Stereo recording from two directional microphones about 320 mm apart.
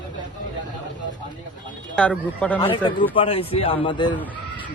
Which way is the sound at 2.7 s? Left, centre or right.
Centre.